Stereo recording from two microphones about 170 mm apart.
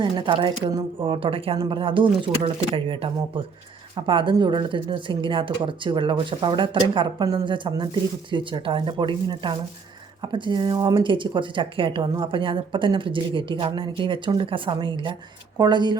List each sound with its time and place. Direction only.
0.0 s speech: 30° right (ahead or behind)